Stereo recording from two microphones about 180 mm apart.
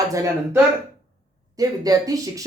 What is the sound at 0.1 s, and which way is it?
Speech, 20° right (ahead or behind).